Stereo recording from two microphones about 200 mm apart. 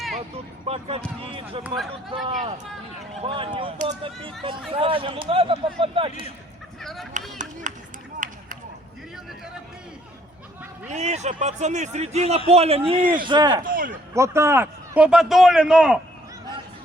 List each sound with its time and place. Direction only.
0.6 s speech: 30° right (ahead or behind)
6.8 s a man's voice: centre (ahead or behind)
7.6 s run: 40° right (ahead or behind)
8.2 s a sound: 40° right (ahead or behind)
10.8 s speech: 35° right (ahead or behind)
13.7 s a man's voice: 45° right (ahead or behind)
14.1 s a man's voice: 15° right (ahead or behind)